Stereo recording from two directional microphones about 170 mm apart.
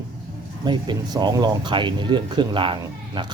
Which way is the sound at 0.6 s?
25° right (ahead or behind).